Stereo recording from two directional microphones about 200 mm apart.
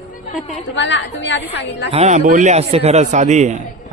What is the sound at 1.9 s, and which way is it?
A man's voice, 35° right (ahead or behind).